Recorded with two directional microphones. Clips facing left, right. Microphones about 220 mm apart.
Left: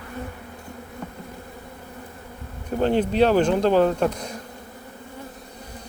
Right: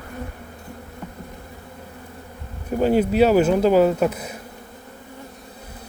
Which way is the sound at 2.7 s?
10° right (ahead or behind).